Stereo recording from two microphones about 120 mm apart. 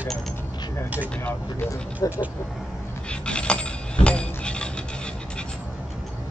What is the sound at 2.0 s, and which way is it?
Speech, 30° left (ahead or behind).